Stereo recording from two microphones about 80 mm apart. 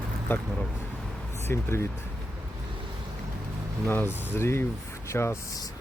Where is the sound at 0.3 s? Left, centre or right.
Left.